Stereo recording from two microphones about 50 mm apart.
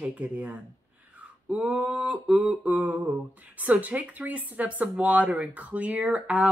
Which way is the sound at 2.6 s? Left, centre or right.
Right.